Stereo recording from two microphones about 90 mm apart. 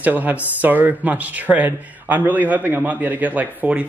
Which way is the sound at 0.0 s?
20° right (ahead or behind).